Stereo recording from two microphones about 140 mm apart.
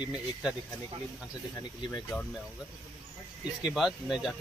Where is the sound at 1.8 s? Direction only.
30° left (ahead or behind).